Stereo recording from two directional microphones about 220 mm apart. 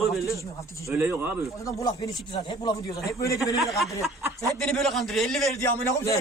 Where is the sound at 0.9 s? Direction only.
10° right (ahead or behind).